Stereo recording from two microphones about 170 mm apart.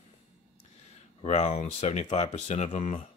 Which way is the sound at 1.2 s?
40° left (ahead or behind).